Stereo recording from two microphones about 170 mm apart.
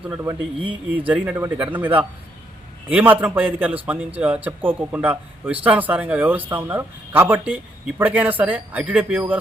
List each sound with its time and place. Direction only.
0.1 s speech: 15° right (ahead or behind)
2.9 s speech: 10° right (ahead or behind)